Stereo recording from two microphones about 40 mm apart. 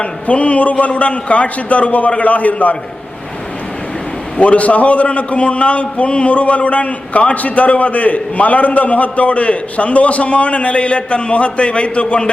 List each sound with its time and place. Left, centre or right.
0.0 s a man's voice: left
4.4 s a man's voice: left